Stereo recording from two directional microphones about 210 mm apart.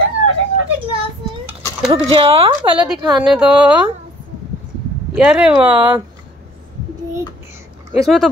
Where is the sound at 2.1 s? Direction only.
25° right (ahead or behind).